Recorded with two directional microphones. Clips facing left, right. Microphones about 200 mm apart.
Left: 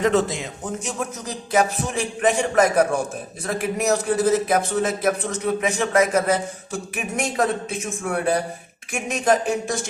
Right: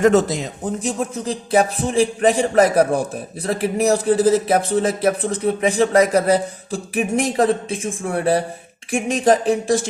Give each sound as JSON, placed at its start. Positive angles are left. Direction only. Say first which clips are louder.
{"t": 0.0, "sound": "speech", "louder": "right 5 dB", "side_deg": -45}